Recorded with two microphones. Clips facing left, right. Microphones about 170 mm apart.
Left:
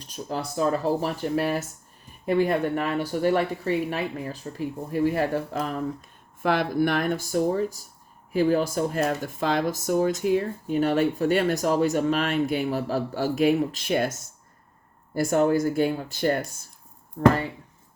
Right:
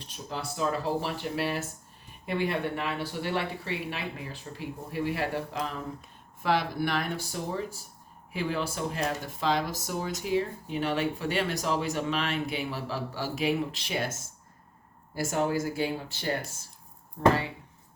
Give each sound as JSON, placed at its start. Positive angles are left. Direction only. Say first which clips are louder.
{"t": 0.0, "sound": "speech", "louder": "left 6 dB", "side_deg": 40}
{"t": 6.4, "sound": "speech", "louder": "left 5 dB", "side_deg": 50}
{"t": 15.1, "sound": "speech", "louder": "left 7 dB", "side_deg": 55}